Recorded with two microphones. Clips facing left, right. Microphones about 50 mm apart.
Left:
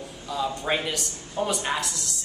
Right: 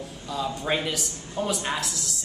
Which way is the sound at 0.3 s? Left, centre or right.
Centre.